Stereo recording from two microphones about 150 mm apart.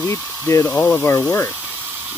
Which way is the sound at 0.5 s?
20° left (ahead or behind).